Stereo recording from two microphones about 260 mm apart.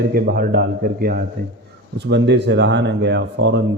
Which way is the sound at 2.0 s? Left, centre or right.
Right.